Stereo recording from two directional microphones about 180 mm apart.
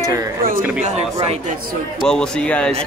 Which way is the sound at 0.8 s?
35° right (ahead or behind).